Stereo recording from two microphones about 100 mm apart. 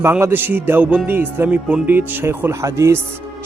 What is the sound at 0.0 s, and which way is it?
A man's voice, 25° right (ahead or behind).